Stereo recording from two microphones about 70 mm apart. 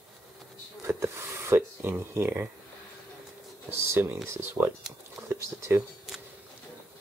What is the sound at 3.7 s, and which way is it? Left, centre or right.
Speech, right.